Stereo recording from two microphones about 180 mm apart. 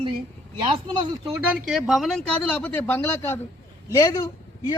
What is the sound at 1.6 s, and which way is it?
A man's voice, centre (ahead or behind).